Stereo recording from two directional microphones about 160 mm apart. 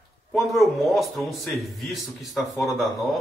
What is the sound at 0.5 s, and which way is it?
A man's voice, centre (ahead or behind).